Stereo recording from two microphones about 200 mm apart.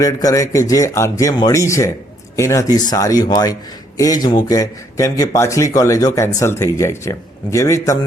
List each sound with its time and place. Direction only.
0.0 s speech: 15° left (ahead or behind)